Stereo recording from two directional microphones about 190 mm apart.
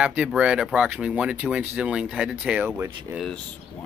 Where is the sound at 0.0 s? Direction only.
5° right (ahead or behind).